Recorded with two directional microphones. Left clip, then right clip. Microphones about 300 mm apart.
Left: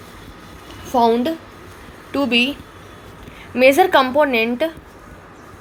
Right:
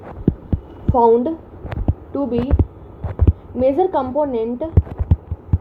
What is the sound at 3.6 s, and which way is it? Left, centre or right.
A woman's voice, left.